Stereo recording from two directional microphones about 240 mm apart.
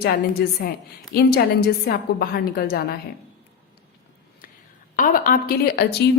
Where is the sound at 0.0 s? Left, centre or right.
Left.